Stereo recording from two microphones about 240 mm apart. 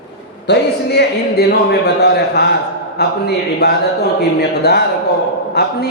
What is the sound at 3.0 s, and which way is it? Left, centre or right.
Speech, left.